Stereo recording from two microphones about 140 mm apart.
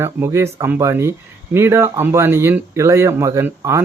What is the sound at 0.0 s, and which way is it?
Speech, 15° right (ahead or behind).